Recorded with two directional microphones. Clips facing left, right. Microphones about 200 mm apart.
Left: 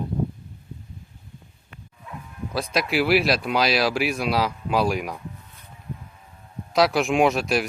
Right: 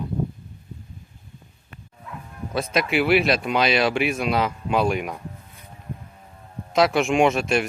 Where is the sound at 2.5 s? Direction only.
Centre (ahead or behind).